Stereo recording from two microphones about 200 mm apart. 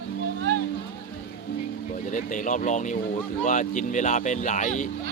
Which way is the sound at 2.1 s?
40° left (ahead or behind).